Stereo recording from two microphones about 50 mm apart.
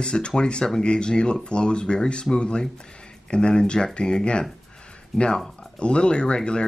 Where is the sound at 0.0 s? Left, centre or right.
Centre.